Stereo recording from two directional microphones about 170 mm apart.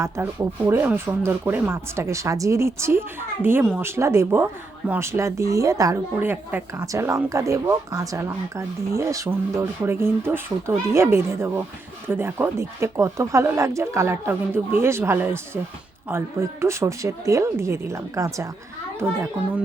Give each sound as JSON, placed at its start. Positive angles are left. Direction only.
{"t": 0.0, "sound": "speech", "side_deg": -10}